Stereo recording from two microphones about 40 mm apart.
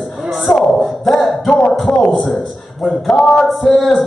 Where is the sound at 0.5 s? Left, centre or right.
Centre.